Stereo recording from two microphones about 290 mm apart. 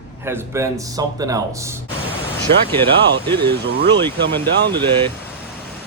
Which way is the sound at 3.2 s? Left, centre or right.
Centre.